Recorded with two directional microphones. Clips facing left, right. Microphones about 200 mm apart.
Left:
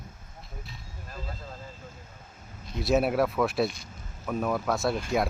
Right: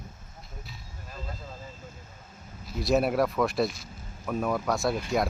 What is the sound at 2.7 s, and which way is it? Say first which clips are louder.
Speech: even; centre (ahead or behind).